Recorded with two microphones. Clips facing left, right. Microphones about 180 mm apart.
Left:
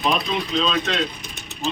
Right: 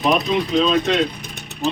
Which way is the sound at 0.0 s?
45° right (ahead or behind).